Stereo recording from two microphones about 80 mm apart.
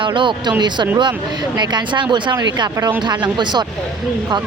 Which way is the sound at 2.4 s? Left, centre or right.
Right.